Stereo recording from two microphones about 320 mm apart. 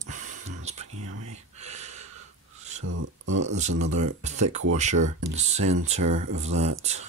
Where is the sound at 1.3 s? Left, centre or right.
Right.